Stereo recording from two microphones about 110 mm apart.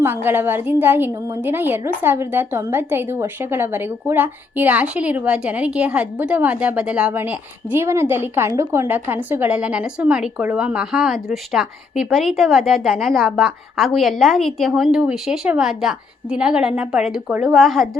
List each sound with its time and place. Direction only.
0.0 s a woman's voice: 20° right (ahead or behind); by 17.8 s centre (ahead or behind)